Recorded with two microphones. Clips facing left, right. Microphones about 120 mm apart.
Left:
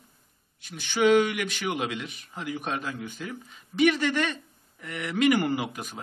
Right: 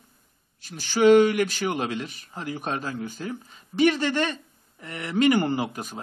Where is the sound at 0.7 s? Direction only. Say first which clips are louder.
Right 4 dB; 35° right (ahead or behind).